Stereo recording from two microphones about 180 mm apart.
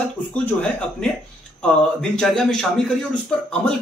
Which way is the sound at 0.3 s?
5° left (ahead or behind).